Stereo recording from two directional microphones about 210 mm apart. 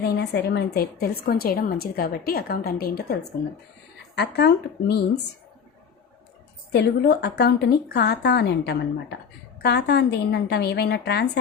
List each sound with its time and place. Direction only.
0.1 s a woman's voice: 55° left (ahead or behind)
4.4 s a woman's voice: 50° left (ahead or behind)
6.7 s a woman's voice: 55° left (ahead or behind)